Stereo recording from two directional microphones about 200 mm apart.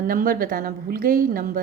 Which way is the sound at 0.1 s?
45° right (ahead or behind).